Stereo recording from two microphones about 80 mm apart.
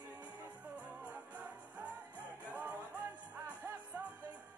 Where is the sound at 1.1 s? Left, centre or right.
Centre.